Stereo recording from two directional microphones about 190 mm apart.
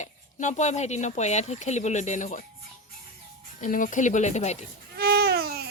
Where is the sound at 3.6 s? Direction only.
45° left (ahead or behind).